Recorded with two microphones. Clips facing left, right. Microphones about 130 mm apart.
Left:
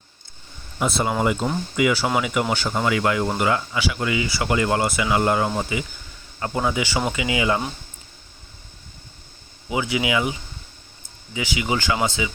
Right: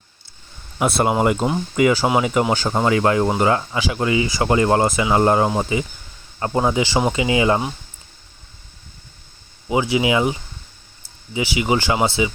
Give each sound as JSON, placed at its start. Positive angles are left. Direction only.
{"t": 0.8, "sound": "speech", "side_deg": -60}
{"t": 1.2, "sound": "speech", "side_deg": -50}
{"t": 9.6, "sound": "speech", "side_deg": -30}
{"t": 11.3, "sound": "speech", "side_deg": -25}